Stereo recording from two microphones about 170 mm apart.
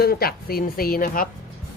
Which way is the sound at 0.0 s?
65° left (ahead or behind).